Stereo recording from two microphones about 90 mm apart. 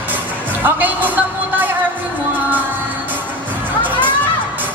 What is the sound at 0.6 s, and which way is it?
Speech, 20° right (ahead or behind).